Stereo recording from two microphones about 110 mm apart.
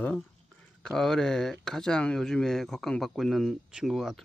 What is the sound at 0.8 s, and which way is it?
Speech, 5° left (ahead or behind).